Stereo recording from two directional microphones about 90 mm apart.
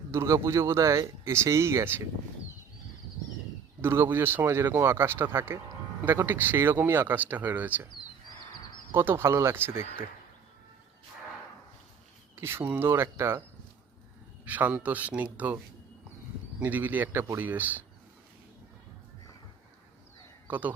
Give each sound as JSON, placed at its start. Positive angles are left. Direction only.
{"t": 0.1, "sound": "speech", "side_deg": -30}
{"t": 3.8, "sound": "speech", "side_deg": -25}
{"t": 8.9, "sound": "speech", "side_deg": -25}
{"t": 12.4, "sound": "speech", "side_deg": -30}
{"t": 14.4, "sound": "speech", "side_deg": -20}
{"t": 16.6, "sound": "speech", "side_deg": -20}
{"t": 20.5, "sound": "speech", "side_deg": -20}